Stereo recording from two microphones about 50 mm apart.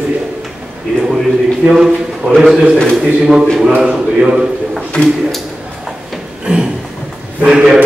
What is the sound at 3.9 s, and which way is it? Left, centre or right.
Speech, right.